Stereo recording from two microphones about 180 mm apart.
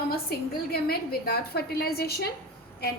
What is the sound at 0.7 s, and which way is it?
A woman's voice, 60° left (ahead or behind).